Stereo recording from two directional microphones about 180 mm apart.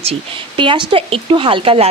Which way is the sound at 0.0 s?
30° right (ahead or behind).